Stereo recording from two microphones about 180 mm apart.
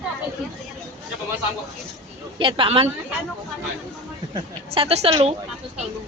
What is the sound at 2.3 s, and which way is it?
Speech, 30° right (ahead or behind).